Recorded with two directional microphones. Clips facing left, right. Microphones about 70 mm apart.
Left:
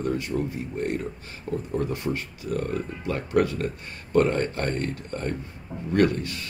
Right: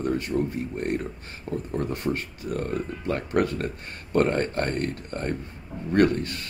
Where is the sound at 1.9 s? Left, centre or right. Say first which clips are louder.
Right 1 dB; right.